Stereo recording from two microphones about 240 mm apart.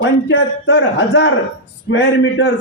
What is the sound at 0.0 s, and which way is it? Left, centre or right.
A man's voice, left.